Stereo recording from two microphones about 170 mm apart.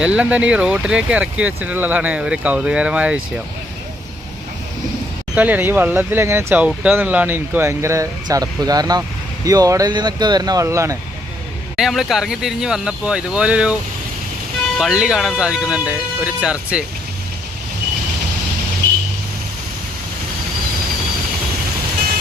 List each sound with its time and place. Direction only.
0.0 s speech: 5° right (ahead or behind)
5.3 s speech: 10° right (ahead or behind)
11.8 s speech: centre (ahead or behind)
14.8 s speech: 5° right (ahead or behind)